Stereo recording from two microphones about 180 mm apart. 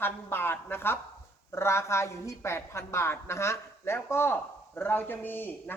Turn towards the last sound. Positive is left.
turn(degrees=10)  # may be behind; listen again after turning